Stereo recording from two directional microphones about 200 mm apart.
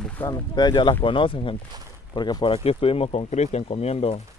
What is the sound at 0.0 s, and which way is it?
Boat, 10° left (ahead or behind).